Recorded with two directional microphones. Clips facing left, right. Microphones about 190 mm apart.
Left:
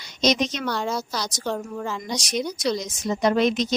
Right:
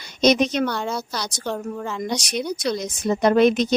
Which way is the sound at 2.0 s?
60° right (ahead or behind).